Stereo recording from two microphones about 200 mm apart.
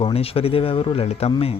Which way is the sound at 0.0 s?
30° left (ahead or behind).